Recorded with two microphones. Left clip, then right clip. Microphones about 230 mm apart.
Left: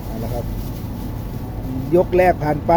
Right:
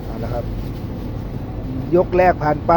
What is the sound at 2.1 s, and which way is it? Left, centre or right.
Speech, centre.